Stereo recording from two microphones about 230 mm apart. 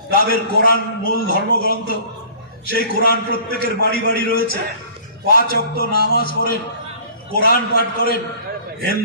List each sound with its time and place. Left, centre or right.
0.1 s a man's voice: left